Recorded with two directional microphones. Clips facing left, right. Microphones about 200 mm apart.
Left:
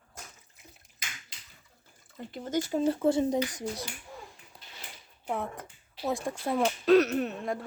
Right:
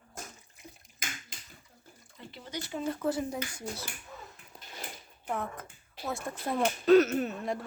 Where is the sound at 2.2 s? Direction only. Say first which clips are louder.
Left 10 dB; 50° left (ahead or behind).